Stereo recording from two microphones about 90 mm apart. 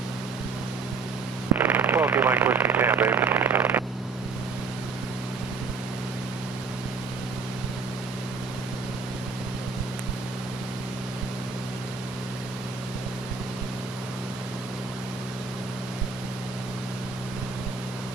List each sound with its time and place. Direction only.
1.5 s speech: 20° right (ahead or behind)